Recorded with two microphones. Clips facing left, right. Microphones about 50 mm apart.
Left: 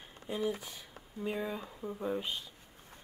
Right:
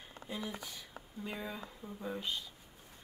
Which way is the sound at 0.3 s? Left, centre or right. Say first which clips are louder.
Left 6 dB; left.